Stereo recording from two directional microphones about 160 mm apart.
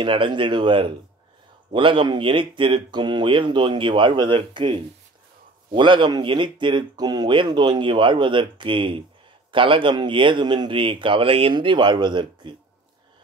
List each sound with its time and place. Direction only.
0.0 s speech: 30° right (ahead or behind)